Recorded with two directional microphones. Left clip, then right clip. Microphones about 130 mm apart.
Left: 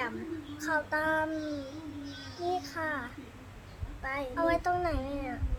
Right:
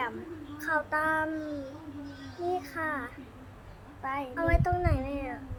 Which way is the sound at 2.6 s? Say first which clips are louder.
Right 1 dB; 20° left (ahead or behind).